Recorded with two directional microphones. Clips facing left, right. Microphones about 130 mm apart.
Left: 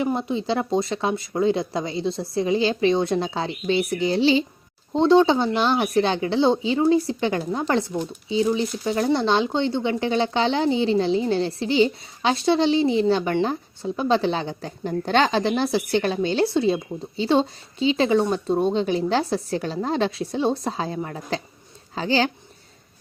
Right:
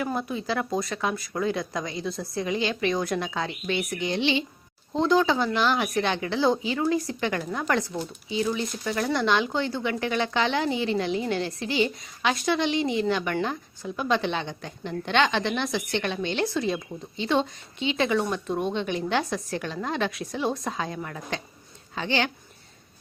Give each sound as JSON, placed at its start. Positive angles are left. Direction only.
{"t": 0.0, "sound": "speech", "side_deg": 25}